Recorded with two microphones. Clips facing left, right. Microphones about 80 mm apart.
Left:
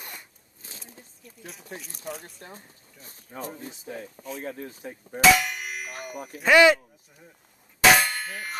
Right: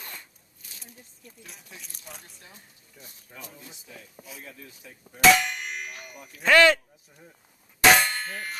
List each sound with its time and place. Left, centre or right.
0.0 s zipper: left
0.6 s a sound: left
1.2 s a sound: centre
1.7 s speech: left
5.2 s clang: centre
5.9 s speech: left
6.4 s speech: centre
7.8 s clang: centre